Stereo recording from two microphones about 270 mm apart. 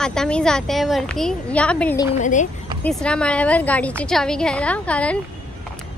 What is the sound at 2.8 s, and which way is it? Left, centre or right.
A woman's voice, centre.